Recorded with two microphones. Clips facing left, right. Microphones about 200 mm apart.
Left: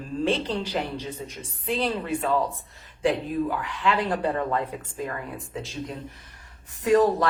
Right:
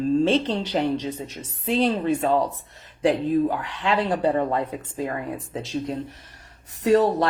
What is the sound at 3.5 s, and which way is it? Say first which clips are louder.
Speech: right 1 dB; 35° right (ahead or behind).